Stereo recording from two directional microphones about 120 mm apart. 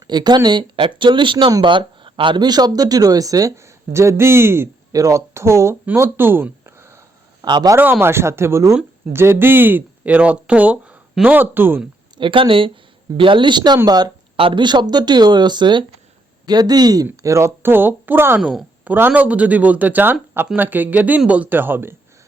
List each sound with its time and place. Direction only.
0.0 s speech: 35° right (ahead or behind)
7.4 s speech: 35° right (ahead or behind)
7.8 s speech: 20° right (ahead or behind)
12.1 s speech: 45° right (ahead or behind)
14.3 s speech: 45° right (ahead or behind); by 18.3 s 15° right (ahead or behind)
18.3 s speech: 5° right (ahead or behind)